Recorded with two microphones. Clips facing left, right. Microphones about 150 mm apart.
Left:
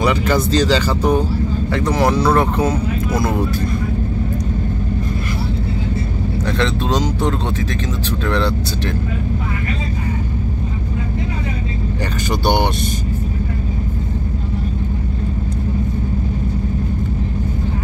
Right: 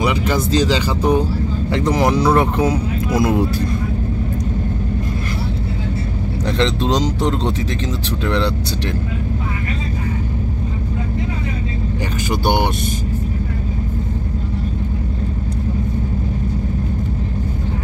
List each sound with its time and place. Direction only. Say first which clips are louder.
0.0 s speech: left 2 dB; 10° right (ahead or behind)
6.6 s speech: right 2 dB; 20° right (ahead or behind)
12.3 s speech: left 1 dB; 10° right (ahead or behind)